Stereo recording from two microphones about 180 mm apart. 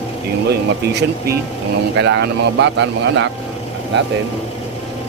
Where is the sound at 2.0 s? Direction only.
70° right (ahead or behind).